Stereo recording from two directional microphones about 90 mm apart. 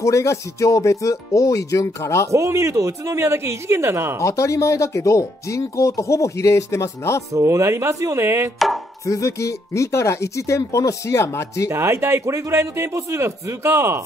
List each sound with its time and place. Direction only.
0.0 s speech: 35° left (ahead or behind)
2.3 s a man's voice: 35° right (ahead or behind)
4.2 s speech: 35° left (ahead or behind)
7.3 s a man's voice: 35° right (ahead or behind)
9.0 s speech: 35° left (ahead or behind)
11.7 s a man's voice: 30° right (ahead or behind)